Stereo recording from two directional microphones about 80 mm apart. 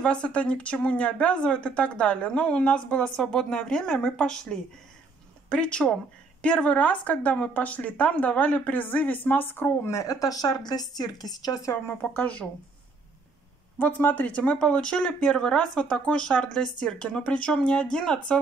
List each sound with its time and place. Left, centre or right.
0.0 s speech: centre
9.8 s speech: left
12.0 s speech: left
13.7 s speech: left